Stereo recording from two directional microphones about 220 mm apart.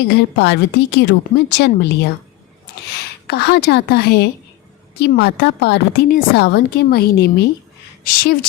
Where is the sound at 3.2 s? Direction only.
50° left (ahead or behind).